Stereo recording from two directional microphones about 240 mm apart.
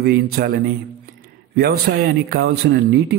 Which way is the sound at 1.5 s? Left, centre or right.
Right.